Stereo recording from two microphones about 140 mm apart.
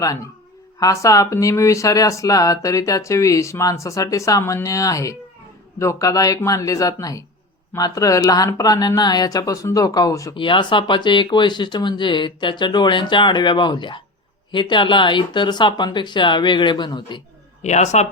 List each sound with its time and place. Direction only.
0.8 s speech: 25° left (ahead or behind)
10.3 s speech: 35° left (ahead or behind)
17.6 s speech: 55° left (ahead or behind)